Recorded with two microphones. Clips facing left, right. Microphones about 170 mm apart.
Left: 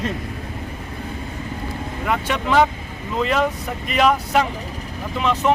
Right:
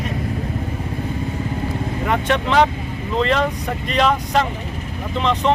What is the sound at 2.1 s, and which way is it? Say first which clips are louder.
Speech: right 1 dB; 5° left (ahead or behind).